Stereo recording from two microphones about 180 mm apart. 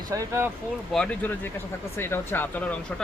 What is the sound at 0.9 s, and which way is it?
Speech, 5° left (ahead or behind).